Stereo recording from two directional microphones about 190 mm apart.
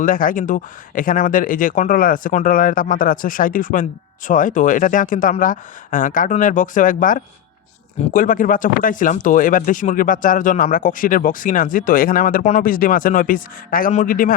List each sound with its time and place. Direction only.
0.0 s speech: 45° left (ahead or behind)